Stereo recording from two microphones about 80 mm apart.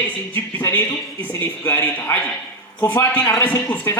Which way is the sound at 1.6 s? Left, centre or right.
Left.